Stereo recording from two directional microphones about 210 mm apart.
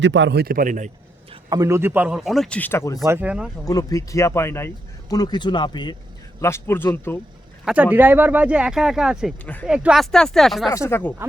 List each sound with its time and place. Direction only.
0.0 s speech: 60° right (ahead or behind); by 0.9 s 40° right (ahead or behind)
1.3 s speech: 20° right (ahead or behind); by 3.0 s 15° left (ahead or behind)
3.0 s speech: 10° right (ahead or behind)
3.7 s speech: 15° left (ahead or behind)
7.6 s speech: 5° right (ahead or behind)
9.6 s speech: 5° right (ahead or behind)
10.7 s speech: 10° left (ahead or behind)